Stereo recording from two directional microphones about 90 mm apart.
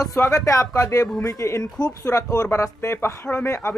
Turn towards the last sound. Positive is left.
turn(degrees=25)  # may be behind; listen again after turning